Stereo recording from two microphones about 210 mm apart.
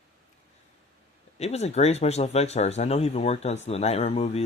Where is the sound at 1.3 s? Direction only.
30° left (ahead or behind).